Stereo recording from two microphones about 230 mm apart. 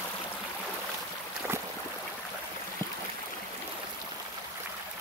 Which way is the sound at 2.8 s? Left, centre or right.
Centre.